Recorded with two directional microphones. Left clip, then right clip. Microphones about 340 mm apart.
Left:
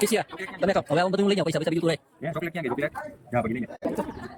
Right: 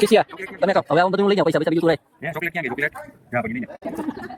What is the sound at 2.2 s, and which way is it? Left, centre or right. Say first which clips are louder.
Speech: right 5 dB; centre.